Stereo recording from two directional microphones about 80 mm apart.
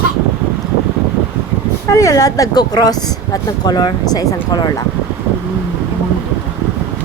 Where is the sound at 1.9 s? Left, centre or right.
Left.